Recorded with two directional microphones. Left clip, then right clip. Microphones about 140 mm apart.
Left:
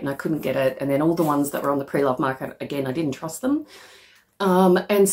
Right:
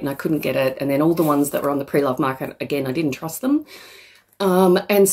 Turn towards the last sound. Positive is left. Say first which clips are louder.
# right 2 dB
turn(degrees=-30)  # may be behind; listen again after turning